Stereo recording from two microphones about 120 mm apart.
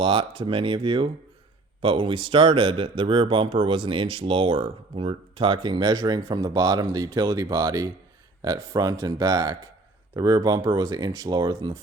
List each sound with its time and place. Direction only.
0.0 s speech: 45° right (ahead or behind)